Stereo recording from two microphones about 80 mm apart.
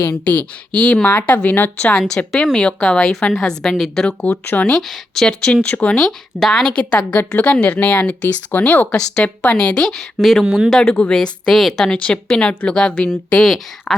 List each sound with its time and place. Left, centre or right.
0.8 s a woman's voice: centre
1.9 s a woman's voice: centre
4.2 s speech: centre
4.7 s a woman's voice: centre